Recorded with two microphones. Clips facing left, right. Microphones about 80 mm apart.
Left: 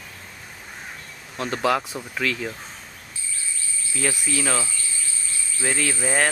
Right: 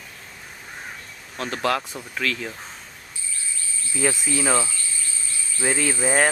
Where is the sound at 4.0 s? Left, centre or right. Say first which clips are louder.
Right 2 dB; centre.